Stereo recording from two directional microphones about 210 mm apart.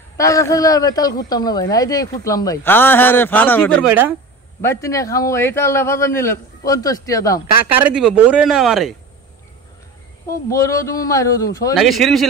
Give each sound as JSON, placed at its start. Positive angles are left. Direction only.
{"t": 0.2, "sound": "speech", "side_deg": 15}
{"t": 7.8, "sound": "speech", "side_deg": -5}
{"t": 10.5, "sound": "speech", "side_deg": 15}
{"t": 11.7, "sound": "speech", "side_deg": 0}